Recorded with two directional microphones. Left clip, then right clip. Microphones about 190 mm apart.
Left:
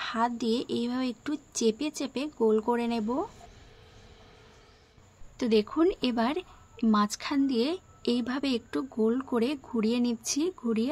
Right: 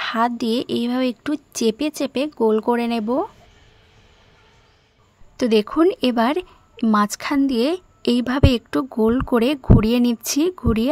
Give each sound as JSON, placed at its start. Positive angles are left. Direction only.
{"t": 0.0, "sound": "speech", "side_deg": -50}
{"t": 5.4, "sound": "speech", "side_deg": -45}